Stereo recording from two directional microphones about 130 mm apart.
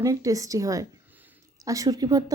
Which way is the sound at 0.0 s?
25° right (ahead or behind).